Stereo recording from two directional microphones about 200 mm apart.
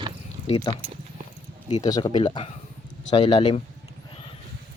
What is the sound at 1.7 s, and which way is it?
Speech, 20° left (ahead or behind).